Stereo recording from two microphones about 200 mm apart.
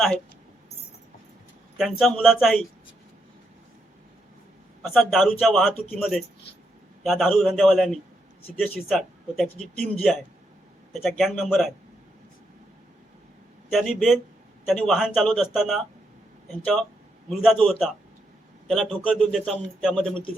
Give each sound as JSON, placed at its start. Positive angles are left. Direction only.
{"t": 1.8, "sound": "a man's voice", "side_deg": 0}
{"t": 4.8, "sound": "a man's voice", "side_deg": 0}
{"t": 13.7, "sound": "a man's voice", "side_deg": 0}
{"t": 17.2, "sound": "a man's voice", "side_deg": 0}